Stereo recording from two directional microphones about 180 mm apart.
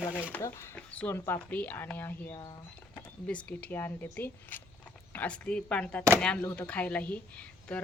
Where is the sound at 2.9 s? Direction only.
5° left (ahead or behind).